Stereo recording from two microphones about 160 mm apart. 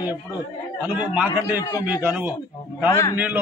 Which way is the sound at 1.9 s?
10° right (ahead or behind).